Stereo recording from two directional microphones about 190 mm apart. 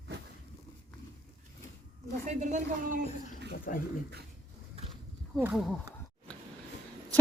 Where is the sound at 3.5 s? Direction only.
50° left (ahead or behind).